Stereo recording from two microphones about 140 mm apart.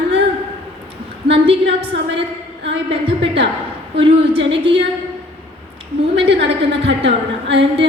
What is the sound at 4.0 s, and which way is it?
Speech, 40° right (ahead or behind).